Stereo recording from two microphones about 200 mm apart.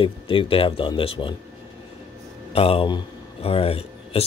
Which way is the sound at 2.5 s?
30° left (ahead or behind).